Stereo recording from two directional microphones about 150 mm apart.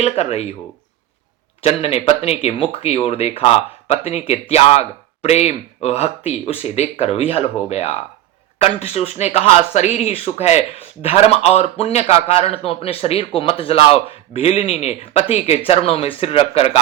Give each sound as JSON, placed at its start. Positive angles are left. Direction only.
{"t": 0.0, "sound": "speech", "side_deg": 45}
{"t": 1.6, "sound": "speech", "side_deg": 40}